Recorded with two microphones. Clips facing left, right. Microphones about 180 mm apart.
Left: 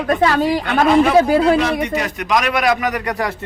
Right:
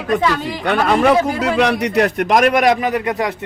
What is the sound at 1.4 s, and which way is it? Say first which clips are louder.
A man's voice: left 1 dB; 75° right (ahead or behind).